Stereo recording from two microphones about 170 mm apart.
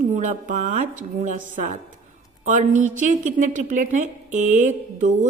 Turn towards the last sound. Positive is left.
turn(degrees=-45)  # may be behind; listen again after turning